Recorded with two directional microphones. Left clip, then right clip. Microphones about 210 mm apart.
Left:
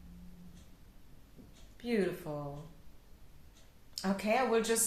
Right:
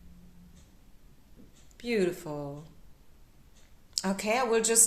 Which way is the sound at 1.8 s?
45° right (ahead or behind).